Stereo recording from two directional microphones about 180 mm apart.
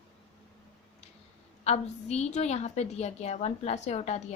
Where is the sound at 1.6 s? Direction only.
40° left (ahead or behind).